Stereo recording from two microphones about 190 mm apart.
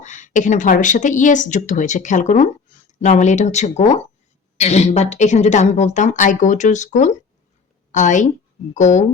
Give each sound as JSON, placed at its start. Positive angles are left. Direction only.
{"t": 0.0, "sound": "a woman's voice", "side_deg": 40}